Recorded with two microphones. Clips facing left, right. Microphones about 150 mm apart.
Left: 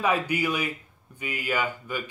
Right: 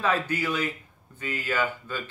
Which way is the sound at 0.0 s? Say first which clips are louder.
Left 1 dB; 15° left (ahead or behind).